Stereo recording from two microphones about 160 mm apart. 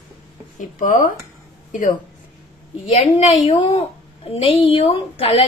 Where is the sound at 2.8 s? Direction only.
45° left (ahead or behind).